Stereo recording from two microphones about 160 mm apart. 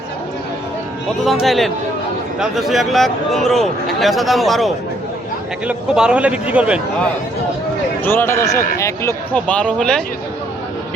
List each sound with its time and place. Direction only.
1.2 s a man's voice: centre (ahead or behind)
8.0 s speech: 15° left (ahead or behind)
9.3 s speech: 10° left (ahead or behind)